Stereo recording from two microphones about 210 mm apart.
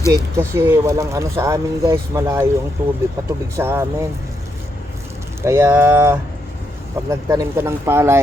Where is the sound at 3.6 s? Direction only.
10° right (ahead or behind).